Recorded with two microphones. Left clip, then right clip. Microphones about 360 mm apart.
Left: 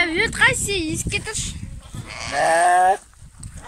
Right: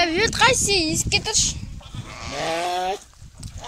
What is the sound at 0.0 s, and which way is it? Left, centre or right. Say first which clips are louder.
Speech: even; centre.